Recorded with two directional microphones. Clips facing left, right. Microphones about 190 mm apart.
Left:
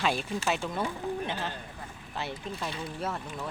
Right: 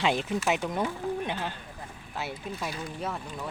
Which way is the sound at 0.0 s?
20° right (ahead or behind).